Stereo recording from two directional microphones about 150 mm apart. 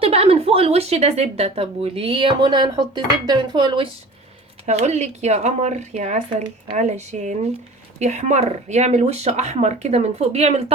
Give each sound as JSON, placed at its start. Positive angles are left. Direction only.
{"t": 0.0, "sound": "a woman's voice", "side_deg": -40}
{"t": 4.6, "sound": "speech", "side_deg": -50}